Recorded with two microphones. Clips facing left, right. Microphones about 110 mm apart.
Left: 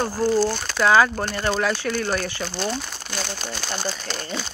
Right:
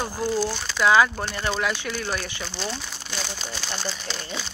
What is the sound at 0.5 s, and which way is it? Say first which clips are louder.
Speech: left 2 dB; 45° left (ahead or behind).